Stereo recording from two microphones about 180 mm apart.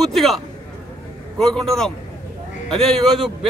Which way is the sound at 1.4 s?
5° left (ahead or behind).